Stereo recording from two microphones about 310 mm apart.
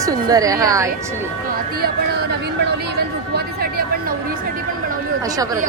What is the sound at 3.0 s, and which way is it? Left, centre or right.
Speech, right.